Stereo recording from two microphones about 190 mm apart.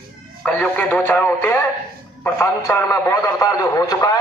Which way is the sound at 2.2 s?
10° left (ahead or behind).